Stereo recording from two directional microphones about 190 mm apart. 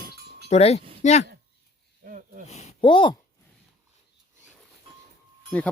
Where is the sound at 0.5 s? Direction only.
35° left (ahead or behind).